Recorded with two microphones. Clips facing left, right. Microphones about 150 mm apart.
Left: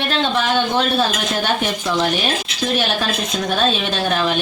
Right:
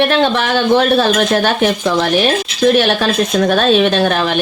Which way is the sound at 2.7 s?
70° right (ahead or behind).